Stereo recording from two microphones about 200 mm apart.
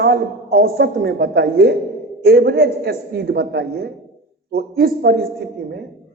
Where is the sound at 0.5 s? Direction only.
50° right (ahead or behind).